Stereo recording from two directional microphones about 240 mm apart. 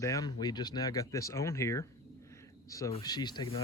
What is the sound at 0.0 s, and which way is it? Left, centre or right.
Speech, centre.